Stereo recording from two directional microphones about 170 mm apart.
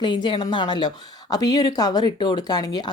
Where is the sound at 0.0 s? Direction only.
25° left (ahead or behind).